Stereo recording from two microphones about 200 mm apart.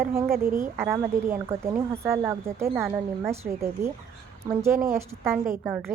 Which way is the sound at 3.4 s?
45° right (ahead or behind).